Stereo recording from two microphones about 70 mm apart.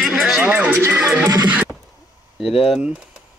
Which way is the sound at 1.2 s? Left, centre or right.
Right.